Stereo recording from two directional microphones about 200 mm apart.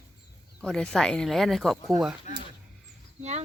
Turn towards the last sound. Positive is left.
turn(degrees=-35)  # may be behind; listen again after turning